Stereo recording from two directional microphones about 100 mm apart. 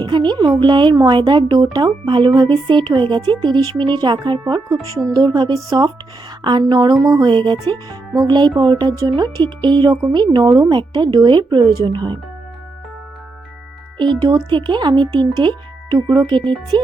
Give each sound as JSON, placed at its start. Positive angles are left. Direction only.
{"t": 0.0, "sound": "a woman's voice", "side_deg": -50}
{"t": 7.7, "sound": "a woman's voice", "side_deg": -40}
{"t": 14.0, "sound": "a woman's voice", "side_deg": -50}